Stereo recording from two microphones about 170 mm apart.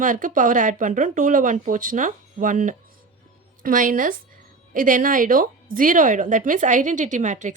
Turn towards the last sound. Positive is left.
turn(degrees=-45)  # may be behind; listen again after turning